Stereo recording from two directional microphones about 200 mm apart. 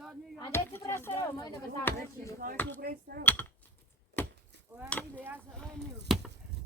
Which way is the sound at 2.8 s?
50° right (ahead or behind).